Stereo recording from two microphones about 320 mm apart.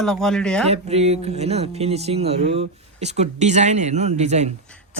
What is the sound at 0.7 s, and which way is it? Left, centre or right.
Speech, centre.